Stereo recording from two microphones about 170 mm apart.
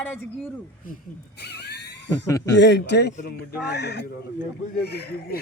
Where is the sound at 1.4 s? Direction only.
75° left (ahead or behind).